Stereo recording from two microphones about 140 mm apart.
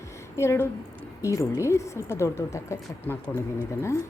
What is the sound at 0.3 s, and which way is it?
Speech, 20° left (ahead or behind).